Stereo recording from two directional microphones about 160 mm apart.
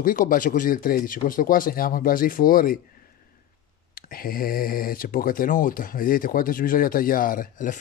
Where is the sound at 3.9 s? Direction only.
65° left (ahead or behind).